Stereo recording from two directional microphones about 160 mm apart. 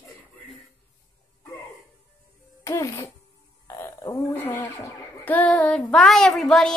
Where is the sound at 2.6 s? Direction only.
20° left (ahead or behind).